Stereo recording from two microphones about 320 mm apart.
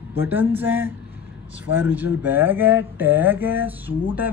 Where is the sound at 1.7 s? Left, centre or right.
Centre.